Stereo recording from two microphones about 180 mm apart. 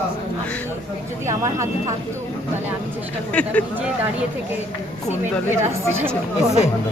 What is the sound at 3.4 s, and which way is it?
Speech, 5° left (ahead or behind).